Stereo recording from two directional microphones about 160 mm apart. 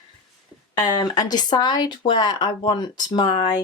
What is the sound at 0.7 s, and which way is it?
Speech, 25° left (ahead or behind).